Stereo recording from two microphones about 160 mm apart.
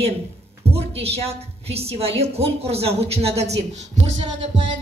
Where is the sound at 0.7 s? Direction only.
40° right (ahead or behind).